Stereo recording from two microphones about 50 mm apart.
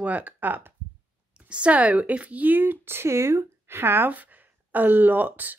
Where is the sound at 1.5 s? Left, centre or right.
Right.